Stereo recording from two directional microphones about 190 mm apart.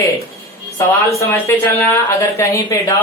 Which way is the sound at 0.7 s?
15° left (ahead or behind).